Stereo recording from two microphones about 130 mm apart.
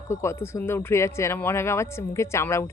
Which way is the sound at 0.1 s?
20° left (ahead or behind).